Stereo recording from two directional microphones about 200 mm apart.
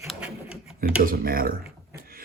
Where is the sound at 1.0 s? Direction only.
45° right (ahead or behind).